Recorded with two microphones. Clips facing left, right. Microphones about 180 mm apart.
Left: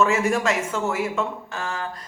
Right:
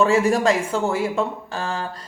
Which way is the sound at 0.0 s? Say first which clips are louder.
Right 3 dB; 35° right (ahead or behind).